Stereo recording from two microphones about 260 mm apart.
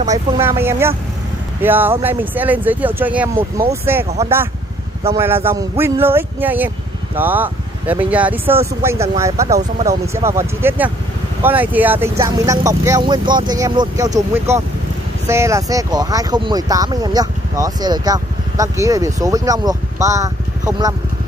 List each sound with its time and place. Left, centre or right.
0.1 s speech: centre
4.0 s speech: right
5.1 s speech: centre
15.2 s speech: centre